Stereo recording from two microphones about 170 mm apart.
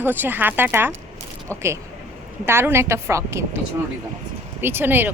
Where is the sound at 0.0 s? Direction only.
10° right (ahead or behind).